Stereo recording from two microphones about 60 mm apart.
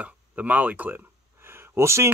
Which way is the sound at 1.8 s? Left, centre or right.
Right.